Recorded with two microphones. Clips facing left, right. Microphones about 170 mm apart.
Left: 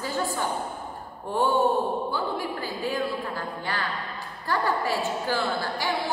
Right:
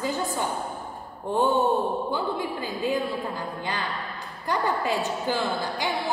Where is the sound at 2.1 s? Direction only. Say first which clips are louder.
Right 1 dB; 20° right (ahead or behind).